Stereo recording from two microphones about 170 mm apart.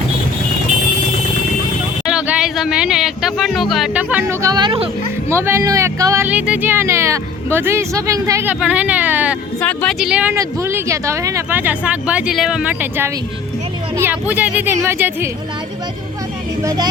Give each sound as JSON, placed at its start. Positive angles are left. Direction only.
{"t": 2.0, "sound": "music", "side_deg": -5}
{"t": 4.4, "sound": "speech", "side_deg": -25}
{"t": 5.3, "sound": "speech", "side_deg": -15}
{"t": 9.6, "sound": "speech", "side_deg": 5}
{"t": 10.1, "sound": "speech", "side_deg": -5}
{"t": 16.6, "sound": "speech", "side_deg": -25}